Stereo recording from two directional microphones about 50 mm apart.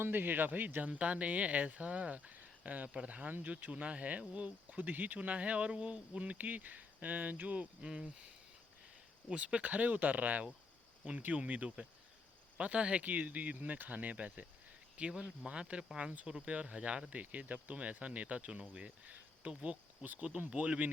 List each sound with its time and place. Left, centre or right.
0.0 s speech: right
7.8 s speech: centre
9.3 s speech: right
15.1 s speech: centre